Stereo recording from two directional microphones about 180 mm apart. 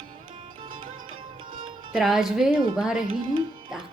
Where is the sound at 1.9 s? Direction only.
5° right (ahead or behind).